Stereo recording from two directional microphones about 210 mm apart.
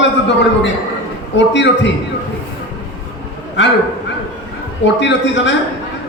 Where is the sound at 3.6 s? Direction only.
55° left (ahead or behind).